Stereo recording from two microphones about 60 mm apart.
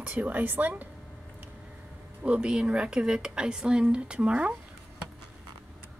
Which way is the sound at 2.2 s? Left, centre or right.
Centre.